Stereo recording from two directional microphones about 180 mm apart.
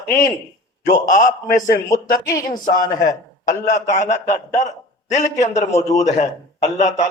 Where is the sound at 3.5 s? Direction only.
45° left (ahead or behind).